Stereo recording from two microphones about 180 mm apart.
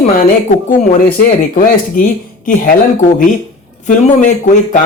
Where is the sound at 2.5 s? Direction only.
50° left (ahead or behind).